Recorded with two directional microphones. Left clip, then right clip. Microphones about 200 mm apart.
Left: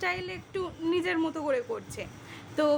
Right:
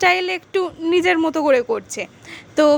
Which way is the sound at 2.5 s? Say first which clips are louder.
Right 11 dB; 40° right (ahead or behind).